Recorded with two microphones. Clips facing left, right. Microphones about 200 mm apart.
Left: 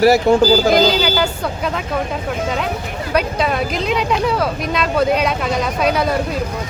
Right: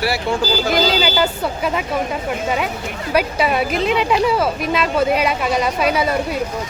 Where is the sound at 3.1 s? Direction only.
5° right (ahead or behind).